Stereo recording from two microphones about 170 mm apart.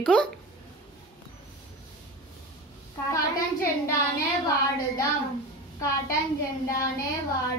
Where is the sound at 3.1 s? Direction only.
20° left (ahead or behind).